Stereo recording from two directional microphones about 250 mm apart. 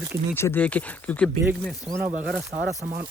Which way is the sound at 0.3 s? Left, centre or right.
Centre.